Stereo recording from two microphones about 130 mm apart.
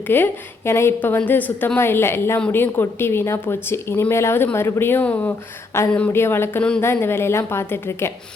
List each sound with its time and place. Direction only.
0.1 s a woman's voice: 20° left (ahead or behind)